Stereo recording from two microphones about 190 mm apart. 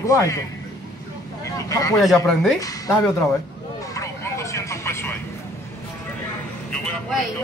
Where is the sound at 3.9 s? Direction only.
15° left (ahead or behind).